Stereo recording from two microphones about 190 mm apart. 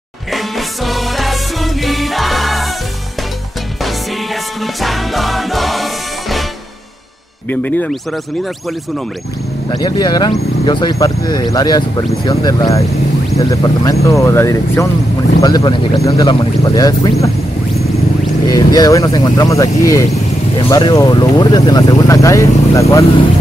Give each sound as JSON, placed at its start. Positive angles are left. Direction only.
{"t": 0.3, "sound": "music", "side_deg": 0}
{"t": 4.8, "sound": "music", "side_deg": 0}
{"t": 7.4, "sound": "speech", "side_deg": 10}
{"t": 9.7, "sound": "speech", "side_deg": 20}
{"t": 18.5, "sound": "speech", "side_deg": 20}